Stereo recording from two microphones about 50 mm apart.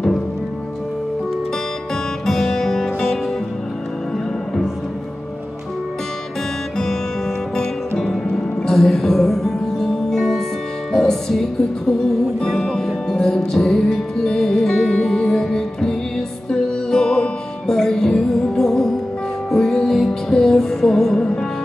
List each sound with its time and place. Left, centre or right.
2.2 s music: centre
8.6 s music: centre
12.4 s music: centre
21.2 s music: left